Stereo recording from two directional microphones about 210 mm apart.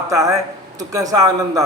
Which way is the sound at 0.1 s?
15° right (ahead or behind).